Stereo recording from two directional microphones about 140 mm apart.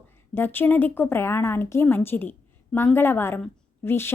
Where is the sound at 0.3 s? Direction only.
15° left (ahead or behind).